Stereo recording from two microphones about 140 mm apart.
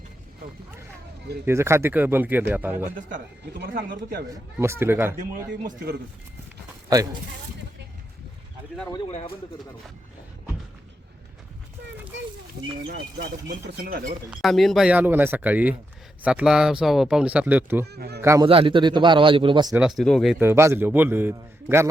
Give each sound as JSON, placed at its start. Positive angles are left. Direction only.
{"t": 1.5, "sound": "speech", "side_deg": -20}
{"t": 4.6, "sound": "speech", "side_deg": -20}
{"t": 5.3, "sound": "a man's voice", "side_deg": -90}
{"t": 6.9, "sound": "speech", "side_deg": -25}
{"t": 9.0, "sound": "speech", "side_deg": 50}
{"t": 13.7, "sound": "a man's voice", "side_deg": -90}
{"t": 14.3, "sound": "speech", "side_deg": 0}
{"t": 18.4, "sound": "a man's voice", "side_deg": -40}
{"t": 19.7, "sound": "speech", "side_deg": -5}
{"t": 20.4, "sound": "speech", "side_deg": -15}